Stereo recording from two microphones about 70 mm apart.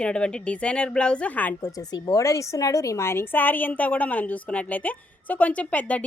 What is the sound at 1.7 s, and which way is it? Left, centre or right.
A woman's voice, left.